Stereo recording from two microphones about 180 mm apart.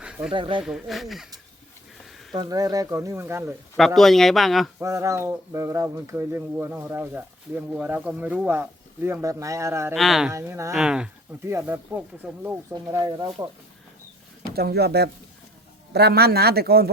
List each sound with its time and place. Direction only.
0.0 s snake: 5° right (ahead or behind)
0.3 s speech: 25° right (ahead or behind)
0.6 s speech: centre (ahead or behind)
2.3 s speech: 20° right (ahead or behind)
3.8 s speech: centre (ahead or behind)
4.8 s speech: 15° right (ahead or behind)
9.9 s speech: centre (ahead or behind)
10.3 s speech: 15° right (ahead or behind)
10.8 s speech: 5° right (ahead or behind); by 13.5 s 25° right (ahead or behind)
14.5 s a man's voice: 60° right (ahead or behind)